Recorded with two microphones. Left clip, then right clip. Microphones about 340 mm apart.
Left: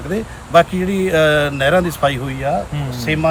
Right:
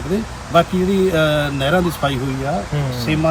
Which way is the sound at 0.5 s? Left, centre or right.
Centre.